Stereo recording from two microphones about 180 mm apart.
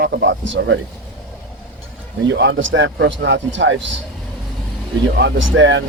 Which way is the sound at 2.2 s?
80° right.